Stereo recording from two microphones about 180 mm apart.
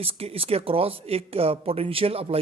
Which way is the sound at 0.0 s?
30° right (ahead or behind).